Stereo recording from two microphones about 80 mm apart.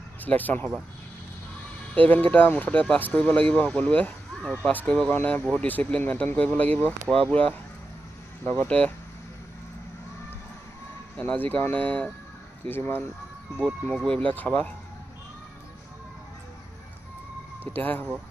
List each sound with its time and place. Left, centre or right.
0.2 s speech: left
2.0 s speech: left
11.1 s speech: centre
13.8 s speech: centre
14.2 s speech: left
17.7 s speech: left